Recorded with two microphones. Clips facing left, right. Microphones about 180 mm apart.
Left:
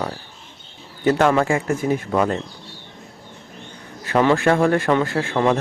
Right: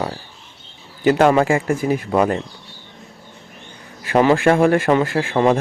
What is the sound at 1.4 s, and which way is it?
Speech, 5° right (ahead or behind).